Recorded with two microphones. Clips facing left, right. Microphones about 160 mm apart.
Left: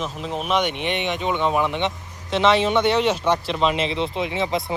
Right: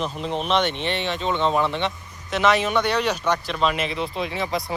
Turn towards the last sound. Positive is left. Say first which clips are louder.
# left 2 dB
turn(degrees=25)  # may be behind; listen again after turning